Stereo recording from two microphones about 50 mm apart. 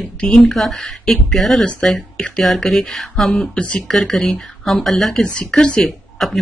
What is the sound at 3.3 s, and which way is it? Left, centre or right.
Speech, left.